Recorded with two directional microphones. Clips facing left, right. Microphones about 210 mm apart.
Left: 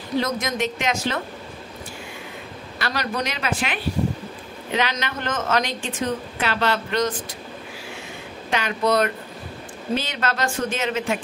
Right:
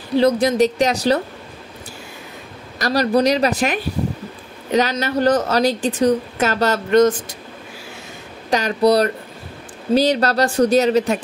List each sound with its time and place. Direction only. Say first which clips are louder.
0.2 s a woman's voice: right 12 dB; 35° right (ahead or behind)
2.8 s a woman's voice: right 10 dB; 40° right (ahead or behind)
8.5 s a woman's voice: right 7 dB; 40° right (ahead or behind)